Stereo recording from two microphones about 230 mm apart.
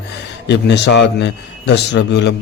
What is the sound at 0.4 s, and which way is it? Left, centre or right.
A man's voice, left.